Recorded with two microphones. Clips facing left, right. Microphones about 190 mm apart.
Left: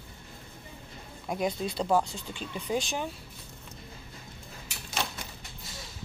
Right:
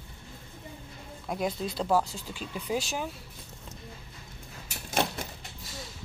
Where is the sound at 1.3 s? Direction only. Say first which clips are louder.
Left 1 dB; centre (ahead or behind).